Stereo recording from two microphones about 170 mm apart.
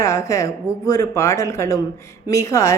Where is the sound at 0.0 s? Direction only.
20° left (ahead or behind).